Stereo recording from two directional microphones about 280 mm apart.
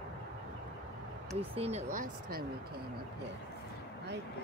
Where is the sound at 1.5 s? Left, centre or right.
Right.